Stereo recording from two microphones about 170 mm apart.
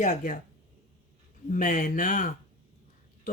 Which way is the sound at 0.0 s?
50° left (ahead or behind).